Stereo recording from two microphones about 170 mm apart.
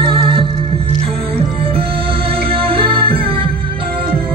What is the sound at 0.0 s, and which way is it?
Music, 30° right (ahead or behind).